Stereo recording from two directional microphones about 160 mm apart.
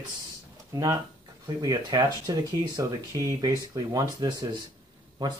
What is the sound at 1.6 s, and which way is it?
Speech, 25° right (ahead or behind).